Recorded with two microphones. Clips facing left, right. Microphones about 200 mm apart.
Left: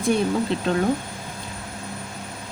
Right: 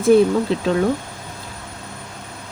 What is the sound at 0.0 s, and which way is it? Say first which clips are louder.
Speech: right 8 dB; centre (ahead or behind).